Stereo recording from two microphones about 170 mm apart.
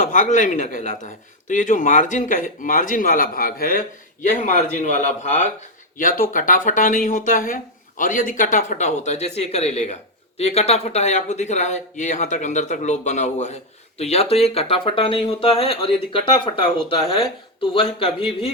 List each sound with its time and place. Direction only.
0.0 s speech: 50° left (ahead or behind)
6.0 s speech: 55° left (ahead or behind); by 18.5 s 30° left (ahead or behind)